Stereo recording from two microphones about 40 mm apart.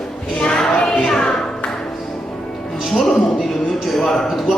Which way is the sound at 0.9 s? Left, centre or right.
Centre.